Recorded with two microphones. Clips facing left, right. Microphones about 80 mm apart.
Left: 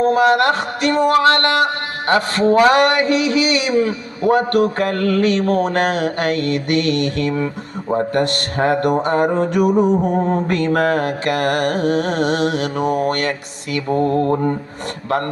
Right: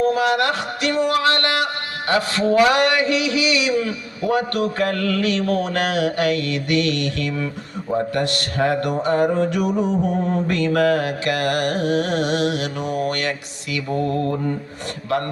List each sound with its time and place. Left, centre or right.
0.0 s music: left